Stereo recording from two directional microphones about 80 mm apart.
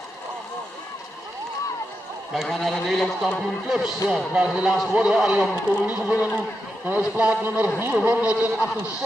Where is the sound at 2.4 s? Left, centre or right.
Centre.